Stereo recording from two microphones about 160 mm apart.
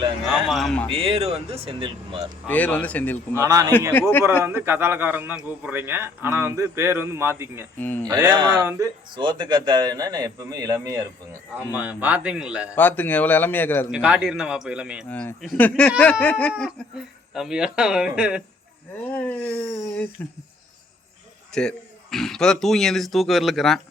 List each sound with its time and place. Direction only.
0.4 s a man's voice: centre (ahead or behind)
0.9 s speech: 35° right (ahead or behind)
2.5 s speech: 10° left (ahead or behind)
3.3 s a man's voice: 20° right (ahead or behind)
7.8 s speech: 10° left (ahead or behind)
8.1 s a man's voice: 15° right (ahead or behind)
9.1 s speech: 30° right (ahead or behind)
11.7 s a man's voice: 10° right (ahead or behind)
12.7 s speech: 10° left (ahead or behind)
13.9 s a man's voice: 5° right (ahead or behind)
15.1 s speech: 10° left (ahead or behind)
17.3 s a man's voice: 5° right (ahead or behind)
19.0 s speech: 10° left (ahead or behind)
21.5 s a man's voice: 5° left (ahead or behind)